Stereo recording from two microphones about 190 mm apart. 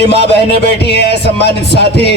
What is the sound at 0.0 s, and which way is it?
Music, 60° left (ahead or behind).